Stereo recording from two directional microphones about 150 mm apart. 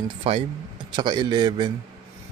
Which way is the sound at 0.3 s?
40° right (ahead or behind).